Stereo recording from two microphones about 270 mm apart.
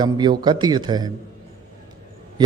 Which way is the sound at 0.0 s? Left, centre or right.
Centre.